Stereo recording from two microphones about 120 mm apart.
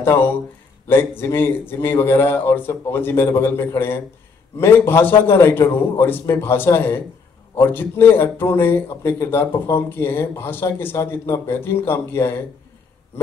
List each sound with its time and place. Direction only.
0.0 s speech: 20° left (ahead or behind)